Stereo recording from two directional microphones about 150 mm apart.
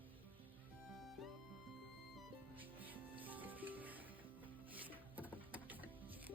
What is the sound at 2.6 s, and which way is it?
Music, 10° right (ahead or behind).